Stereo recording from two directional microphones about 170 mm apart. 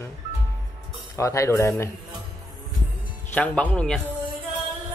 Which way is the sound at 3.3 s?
10° left (ahead or behind).